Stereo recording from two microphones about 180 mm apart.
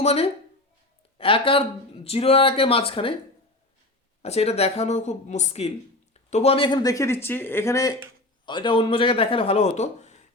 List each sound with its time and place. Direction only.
0.0 s speech: 35° left (ahead or behind)
4.2 s speech: 35° left (ahead or behind)